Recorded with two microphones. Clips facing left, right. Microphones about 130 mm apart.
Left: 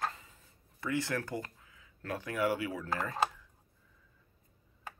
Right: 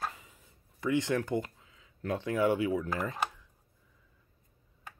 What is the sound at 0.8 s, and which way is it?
Speech, 20° right (ahead or behind).